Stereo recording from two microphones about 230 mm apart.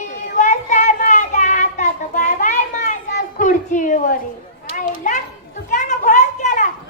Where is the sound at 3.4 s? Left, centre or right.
Left.